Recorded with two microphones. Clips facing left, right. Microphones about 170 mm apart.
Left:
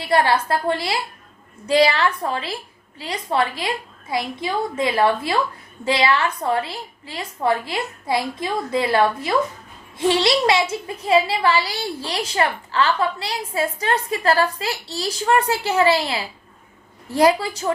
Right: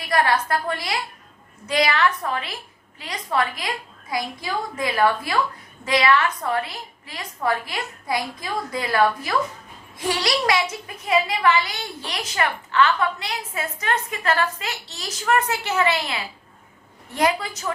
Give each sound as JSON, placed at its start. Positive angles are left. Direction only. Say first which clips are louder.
{"t": 0.0, "sound": "a woman's voice", "louder": "left 3 dB", "side_deg": 30}